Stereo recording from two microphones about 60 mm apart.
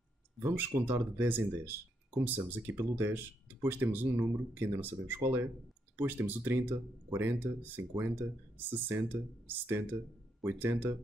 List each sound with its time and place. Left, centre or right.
0.5 s speech: right